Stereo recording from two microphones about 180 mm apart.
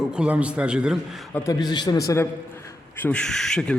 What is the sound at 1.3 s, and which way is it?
Speech, 20° left (ahead or behind).